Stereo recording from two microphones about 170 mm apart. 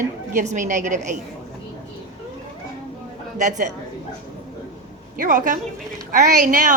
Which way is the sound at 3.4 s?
45° right (ahead or behind).